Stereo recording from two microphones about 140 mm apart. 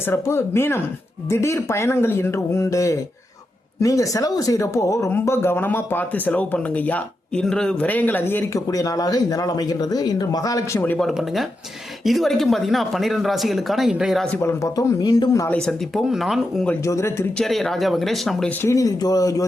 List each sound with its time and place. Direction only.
0.1 s speech: 20° left (ahead or behind)
10.9 s speech: centre (ahead or behind)
14.3 s speech: 15° left (ahead or behind)
15.4 s speech: 5° left (ahead or behind)
16.8 s speech: 20° left (ahead or behind)
17.3 s speech: centre (ahead or behind)
18.6 s speech: 25° left (ahead or behind)